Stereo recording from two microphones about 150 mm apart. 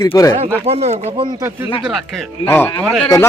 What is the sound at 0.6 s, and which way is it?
Speech, 45° right (ahead or behind).